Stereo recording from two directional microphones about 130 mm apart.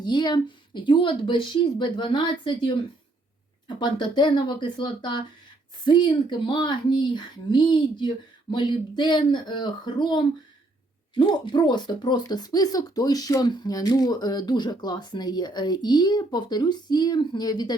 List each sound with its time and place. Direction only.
0.0 s speech: 35° left (ahead or behind)
3.8 s speech: 35° left (ahead or behind)